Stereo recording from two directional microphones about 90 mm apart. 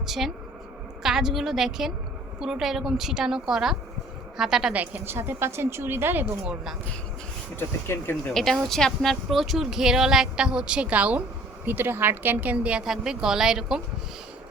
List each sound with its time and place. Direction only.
0.0 s speech: 5° right (ahead or behind)
4.7 s a woman's voice: 20° right (ahead or behind)
6.4 s a woman's voice: 10° right (ahead or behind)
7.5 s speech: 25° left (ahead or behind)
8.3 s a woman's voice: 5° left (ahead or behind)